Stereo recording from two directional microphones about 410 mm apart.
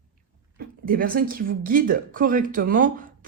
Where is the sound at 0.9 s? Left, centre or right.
Right.